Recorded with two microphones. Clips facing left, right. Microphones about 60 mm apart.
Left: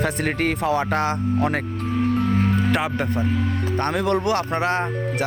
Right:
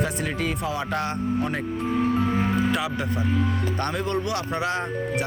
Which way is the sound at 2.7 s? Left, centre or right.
Left.